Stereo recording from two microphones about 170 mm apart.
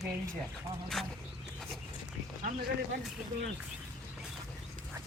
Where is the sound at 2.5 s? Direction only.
50° right (ahead or behind).